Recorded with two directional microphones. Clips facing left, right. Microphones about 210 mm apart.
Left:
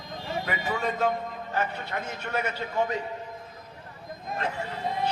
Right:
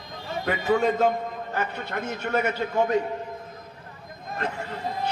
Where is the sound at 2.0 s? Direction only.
45° right (ahead or behind).